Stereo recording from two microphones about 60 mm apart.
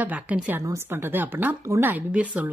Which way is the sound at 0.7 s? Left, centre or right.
Right.